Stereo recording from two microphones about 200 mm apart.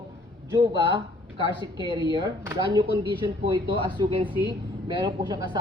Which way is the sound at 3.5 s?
25° right (ahead or behind).